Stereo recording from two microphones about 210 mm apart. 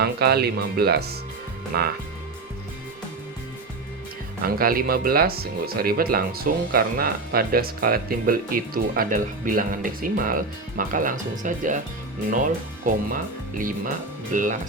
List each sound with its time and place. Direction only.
0.0 s speech: 50° right (ahead or behind)
4.4 s speech: 45° right (ahead or behind)